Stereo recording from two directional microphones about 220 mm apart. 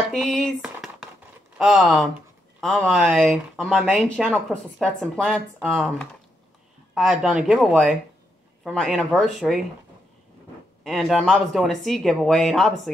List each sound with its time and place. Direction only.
0.1 s a sound: centre (ahead or behind)
1.6 s speech: centre (ahead or behind)
10.8 s speech: centre (ahead or behind)